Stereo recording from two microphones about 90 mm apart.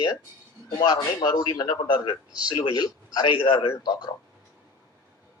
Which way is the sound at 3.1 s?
50° left (ahead or behind).